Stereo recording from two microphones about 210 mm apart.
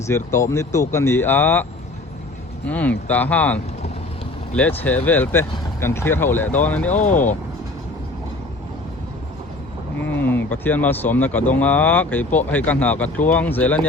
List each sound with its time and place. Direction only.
0.1 s speech: 15° left (ahead or behind)
2.6 s speech: 5° left (ahead or behind)
5.0 s speech: 10° left (ahead or behind)
6.9 s speech: 35° left (ahead or behind)
10.1 s speech: 10° left (ahead or behind)